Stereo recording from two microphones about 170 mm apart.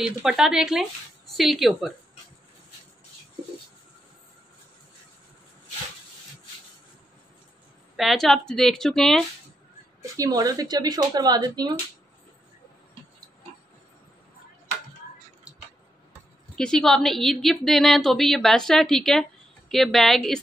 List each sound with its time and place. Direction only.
0.0 s a woman's voice: 5° right (ahead or behind)
7.9 s a woman's voice: centre (ahead or behind)
10.1 s speech: 20° right (ahead or behind)
16.5 s a woman's voice: 5° left (ahead or behind)